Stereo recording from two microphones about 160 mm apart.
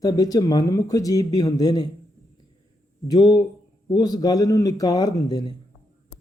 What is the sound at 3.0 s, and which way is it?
Speech, 25° left (ahead or behind).